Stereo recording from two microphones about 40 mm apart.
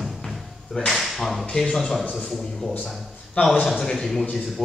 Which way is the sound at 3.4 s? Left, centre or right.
Left.